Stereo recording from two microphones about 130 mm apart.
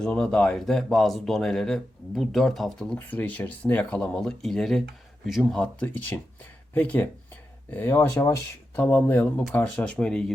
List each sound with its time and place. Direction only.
0.0 s speech: 5° left (ahead or behind)
5.8 s speech: 15° left (ahead or behind)